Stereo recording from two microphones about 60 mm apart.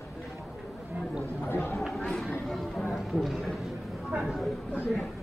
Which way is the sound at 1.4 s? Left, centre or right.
Left.